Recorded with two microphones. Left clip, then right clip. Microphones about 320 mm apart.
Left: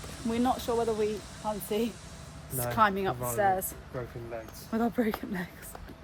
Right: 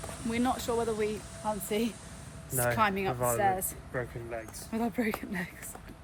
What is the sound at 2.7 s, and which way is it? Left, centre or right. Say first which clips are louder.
Speech: left 5 dB; centre.